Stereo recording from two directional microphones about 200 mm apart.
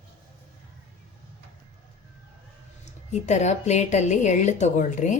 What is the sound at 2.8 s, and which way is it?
A woman's voice, 35° left (ahead or behind).